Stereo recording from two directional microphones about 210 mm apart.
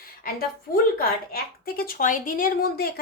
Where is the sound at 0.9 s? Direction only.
45° left (ahead or behind).